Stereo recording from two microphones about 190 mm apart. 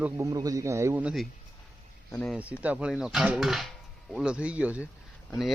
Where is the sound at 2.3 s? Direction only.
5° right (ahead or behind).